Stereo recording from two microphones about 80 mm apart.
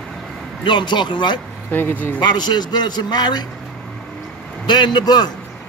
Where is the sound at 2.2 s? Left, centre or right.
Left.